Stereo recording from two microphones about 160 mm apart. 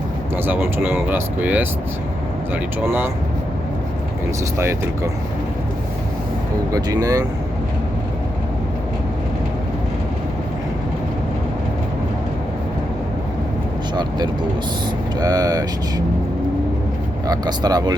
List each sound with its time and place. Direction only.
0.4 s speech: 10° right (ahead or behind)
2.8 s speech: 15° right (ahead or behind)
4.5 s speech: 15° right (ahead or behind)
6.7 s speech: 20° right (ahead or behind)
15.2 s speech: 25° right (ahead or behind)
17.2 s speech: 25° right (ahead or behind)